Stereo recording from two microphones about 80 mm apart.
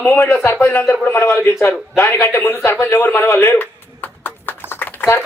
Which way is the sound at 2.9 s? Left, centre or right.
Left.